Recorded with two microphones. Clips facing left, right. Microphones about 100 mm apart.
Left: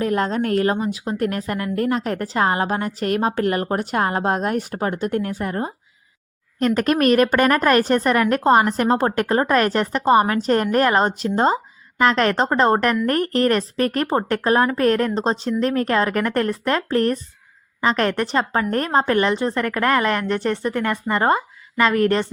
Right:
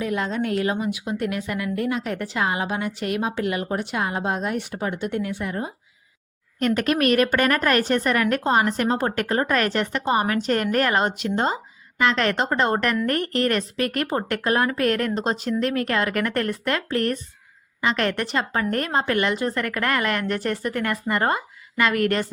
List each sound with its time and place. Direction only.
0.0 s a woman's voice: 45° left (ahead or behind)